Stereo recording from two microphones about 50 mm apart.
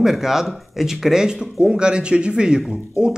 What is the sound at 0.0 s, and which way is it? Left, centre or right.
Speech, centre.